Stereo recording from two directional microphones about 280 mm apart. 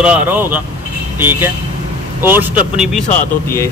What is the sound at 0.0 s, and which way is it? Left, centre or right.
Speech, centre.